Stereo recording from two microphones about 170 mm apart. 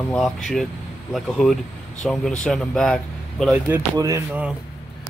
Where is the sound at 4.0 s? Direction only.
20° right (ahead or behind).